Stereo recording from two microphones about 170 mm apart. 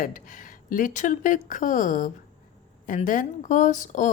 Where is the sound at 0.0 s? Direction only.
50° left (ahead or behind).